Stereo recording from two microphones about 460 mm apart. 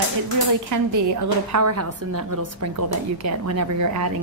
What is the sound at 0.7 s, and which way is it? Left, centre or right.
Speech, right.